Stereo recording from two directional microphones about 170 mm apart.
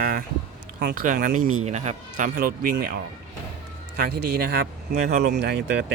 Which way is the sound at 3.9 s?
60° right (ahead or behind).